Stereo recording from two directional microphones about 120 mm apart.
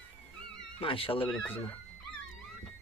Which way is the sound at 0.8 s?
50° left (ahead or behind).